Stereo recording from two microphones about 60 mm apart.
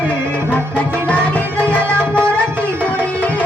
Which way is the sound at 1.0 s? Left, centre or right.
Left.